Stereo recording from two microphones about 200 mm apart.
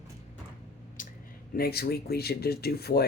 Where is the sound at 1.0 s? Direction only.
40° left (ahead or behind).